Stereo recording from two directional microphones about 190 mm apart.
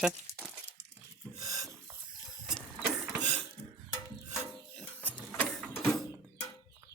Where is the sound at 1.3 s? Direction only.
15° right (ahead or behind).